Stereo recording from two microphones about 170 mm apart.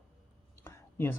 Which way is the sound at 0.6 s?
15° left (ahead or behind).